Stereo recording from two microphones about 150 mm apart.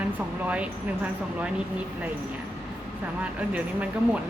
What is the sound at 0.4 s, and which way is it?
Speech, 10° right (ahead or behind).